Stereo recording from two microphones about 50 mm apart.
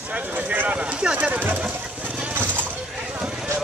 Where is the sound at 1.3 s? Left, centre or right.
Right.